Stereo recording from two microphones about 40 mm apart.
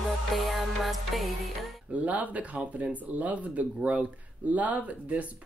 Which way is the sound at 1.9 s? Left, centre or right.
Right.